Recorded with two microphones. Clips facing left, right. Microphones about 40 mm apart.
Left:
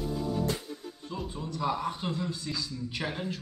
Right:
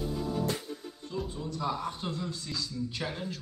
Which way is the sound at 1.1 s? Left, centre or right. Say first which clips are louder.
Right 1 dB; centre.